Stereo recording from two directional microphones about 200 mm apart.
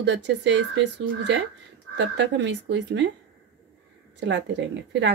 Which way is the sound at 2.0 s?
65° right (ahead or behind).